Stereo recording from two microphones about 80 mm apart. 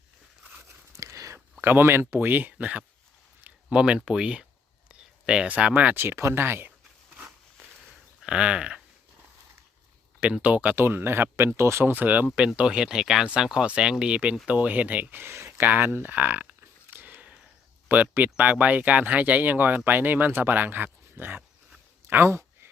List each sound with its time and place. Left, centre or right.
0.9 s a sound: right
1.6 s speech: right
8.2 s speech: centre
10.2 s speech: centre
12.5 s speech: centre
16.9 s a sound: right
17.8 s speech: centre